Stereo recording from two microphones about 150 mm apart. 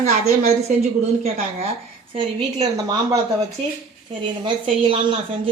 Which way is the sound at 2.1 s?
35° right (ahead or behind).